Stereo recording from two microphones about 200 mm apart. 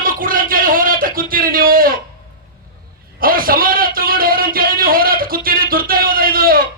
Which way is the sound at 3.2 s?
45° right (ahead or behind).